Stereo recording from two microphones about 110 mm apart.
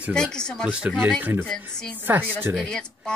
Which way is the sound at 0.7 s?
10° right (ahead or behind).